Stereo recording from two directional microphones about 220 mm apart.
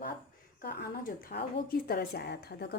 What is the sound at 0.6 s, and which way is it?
A woman's voice, 45° left (ahead or behind).